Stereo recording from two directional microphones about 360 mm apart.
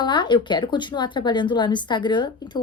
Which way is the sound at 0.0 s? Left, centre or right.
Centre.